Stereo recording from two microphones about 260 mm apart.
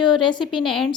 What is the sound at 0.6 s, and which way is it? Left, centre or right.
Speech, centre.